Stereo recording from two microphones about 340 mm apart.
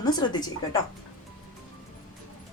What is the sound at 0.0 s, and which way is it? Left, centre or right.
Speech, centre.